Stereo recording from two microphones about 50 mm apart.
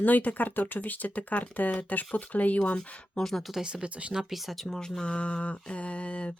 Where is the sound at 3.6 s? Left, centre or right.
Centre.